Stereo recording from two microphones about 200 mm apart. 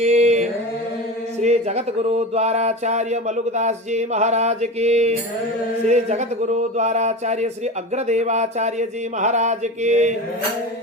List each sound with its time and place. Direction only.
0.0 s chant: 35° right (ahead or behind)
1.4 s speech: 35° right (ahead or behind)